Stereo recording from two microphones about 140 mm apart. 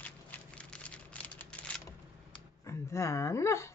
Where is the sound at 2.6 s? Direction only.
20° left (ahead or behind).